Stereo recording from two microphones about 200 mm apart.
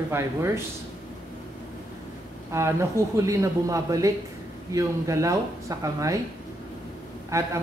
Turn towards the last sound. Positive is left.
turn(degrees=-15)  # may be behind; listen again after turning